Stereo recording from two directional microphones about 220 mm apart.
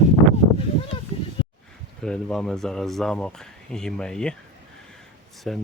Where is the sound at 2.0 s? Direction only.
5° left (ahead or behind).